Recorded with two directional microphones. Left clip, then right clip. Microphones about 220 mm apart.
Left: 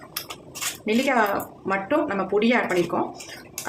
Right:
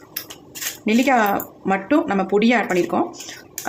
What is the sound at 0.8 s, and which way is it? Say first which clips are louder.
Speech: right 4 dB; 35° right (ahead or behind).